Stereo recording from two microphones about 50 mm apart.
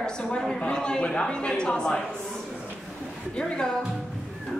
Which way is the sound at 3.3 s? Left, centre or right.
Centre.